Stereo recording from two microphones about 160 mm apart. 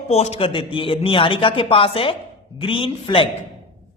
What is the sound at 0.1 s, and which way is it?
Speech, 40° left (ahead or behind).